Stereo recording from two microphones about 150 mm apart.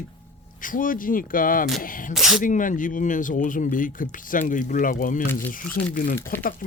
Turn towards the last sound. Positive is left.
turn(degrees=70)  # may be behind; listen again after turning